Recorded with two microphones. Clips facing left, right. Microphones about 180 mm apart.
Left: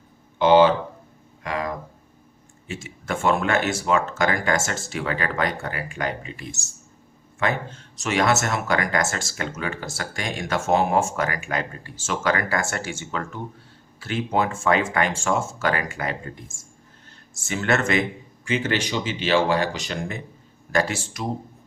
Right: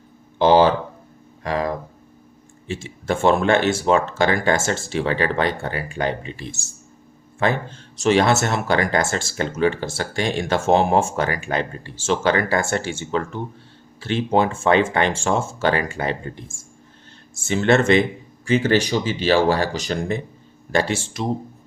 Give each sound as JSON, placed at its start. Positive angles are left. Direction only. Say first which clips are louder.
{"t": 0.3, "sound": "speech", "louder": "right 1 dB", "side_deg": -35}
{"t": 1.5, "sound": "a sound", "louder": "right 5 dB", "side_deg": -35}
{"t": 2.6, "sound": "speech", "louder": "right 6 dB", "side_deg": -30}
{"t": 17.4, "sound": "speech", "louder": "right 6 dB", "side_deg": -30}